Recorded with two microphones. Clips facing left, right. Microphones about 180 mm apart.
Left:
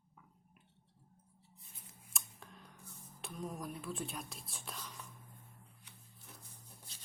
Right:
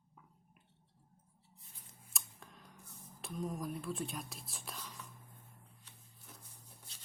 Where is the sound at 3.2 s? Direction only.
Centre (ahead or behind).